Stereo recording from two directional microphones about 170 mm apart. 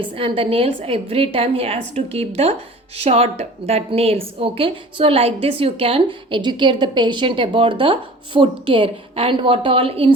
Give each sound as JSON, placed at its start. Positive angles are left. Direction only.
{"t": 0.0, "sound": "a woman's voice", "side_deg": -35}